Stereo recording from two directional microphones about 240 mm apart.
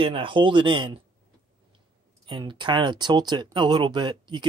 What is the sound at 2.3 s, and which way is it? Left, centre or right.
Speech, centre.